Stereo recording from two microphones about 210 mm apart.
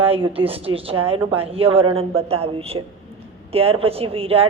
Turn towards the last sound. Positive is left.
turn(degrees=-25)  # may be behind; listen again after turning